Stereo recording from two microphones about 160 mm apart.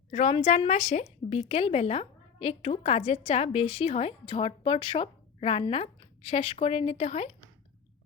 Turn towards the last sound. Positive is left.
turn(degrees=40)  # may be behind; listen again after turning